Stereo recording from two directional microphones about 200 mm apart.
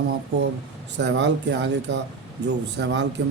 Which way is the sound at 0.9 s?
60° right (ahead or behind).